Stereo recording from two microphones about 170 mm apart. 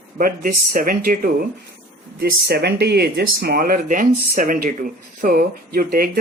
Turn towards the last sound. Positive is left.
turn(degrees=-60)  # may be behind; listen again after turning